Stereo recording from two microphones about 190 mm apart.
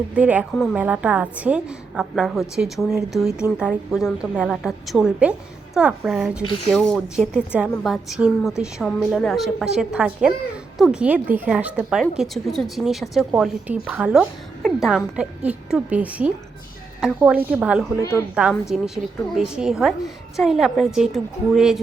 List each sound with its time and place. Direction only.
0.1 s a woman's voice: 5° right (ahead or behind)
6.4 s speech: 25° left (ahead or behind)
6.7 s a woman's voice: centre (ahead or behind)